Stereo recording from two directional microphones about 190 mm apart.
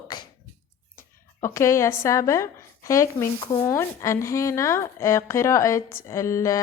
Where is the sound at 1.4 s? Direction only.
15° left (ahead or behind).